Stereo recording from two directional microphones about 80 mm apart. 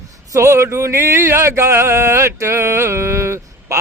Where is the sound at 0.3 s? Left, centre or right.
Right.